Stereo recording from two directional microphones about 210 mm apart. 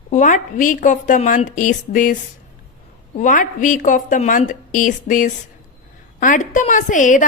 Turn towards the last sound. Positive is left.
turn(degrees=35)  # may be behind; listen again after turning